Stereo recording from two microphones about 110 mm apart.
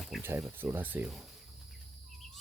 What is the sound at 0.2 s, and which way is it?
Speech, 20° right (ahead or behind).